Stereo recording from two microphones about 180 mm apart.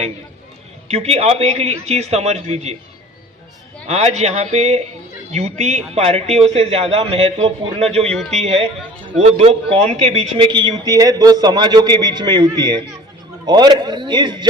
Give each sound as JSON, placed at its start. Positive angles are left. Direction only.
{"t": 0.9, "sound": "a man's voice", "side_deg": -35}
{"t": 3.8, "sound": "a man's voice", "side_deg": -40}